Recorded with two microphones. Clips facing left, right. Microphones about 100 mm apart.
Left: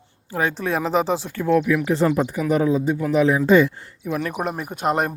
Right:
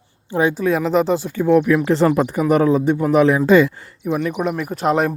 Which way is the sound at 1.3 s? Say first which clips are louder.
Right 5 dB; 20° right (ahead or behind).